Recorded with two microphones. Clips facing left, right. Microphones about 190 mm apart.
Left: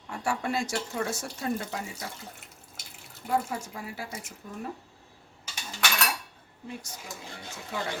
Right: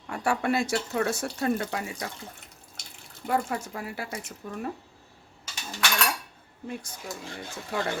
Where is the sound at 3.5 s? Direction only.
70° right (ahead or behind).